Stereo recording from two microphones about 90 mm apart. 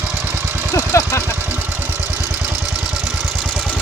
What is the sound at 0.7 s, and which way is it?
Speech, 35° left (ahead or behind).